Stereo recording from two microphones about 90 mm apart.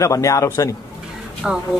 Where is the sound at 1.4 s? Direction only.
5° right (ahead or behind).